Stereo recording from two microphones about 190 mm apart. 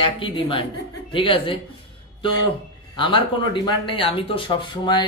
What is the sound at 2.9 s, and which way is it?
A man's voice, 25° left (ahead or behind).